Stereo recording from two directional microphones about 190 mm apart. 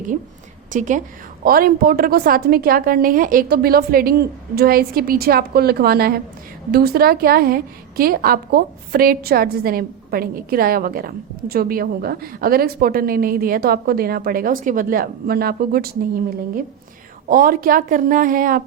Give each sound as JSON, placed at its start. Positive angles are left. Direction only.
{"t": 0.7, "sound": "a woman's voice", "side_deg": -40}
{"t": 17.2, "sound": "a woman's voice", "side_deg": -50}